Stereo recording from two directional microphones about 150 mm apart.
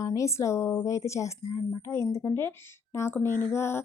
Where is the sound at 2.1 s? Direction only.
20° left (ahead or behind).